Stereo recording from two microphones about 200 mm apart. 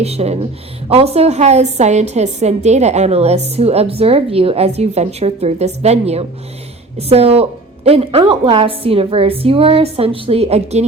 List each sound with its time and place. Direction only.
0.0 s a woman's voice: 30° right (ahead or behind)